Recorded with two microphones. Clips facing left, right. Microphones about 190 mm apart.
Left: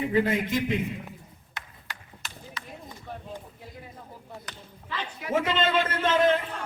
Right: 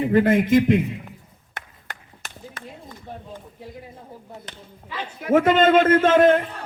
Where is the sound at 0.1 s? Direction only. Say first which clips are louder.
Right 11 dB; 55° right (ahead or behind).